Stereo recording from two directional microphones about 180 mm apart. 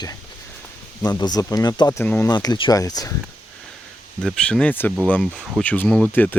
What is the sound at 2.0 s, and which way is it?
Speech, 10° left (ahead or behind).